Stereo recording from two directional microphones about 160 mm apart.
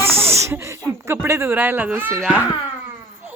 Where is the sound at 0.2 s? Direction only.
15° right (ahead or behind).